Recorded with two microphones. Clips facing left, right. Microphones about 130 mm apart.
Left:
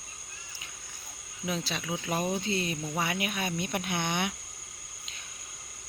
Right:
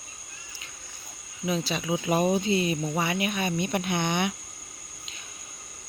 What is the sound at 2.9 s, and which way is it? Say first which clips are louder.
Speech: right 4 dB; centre (ahead or behind).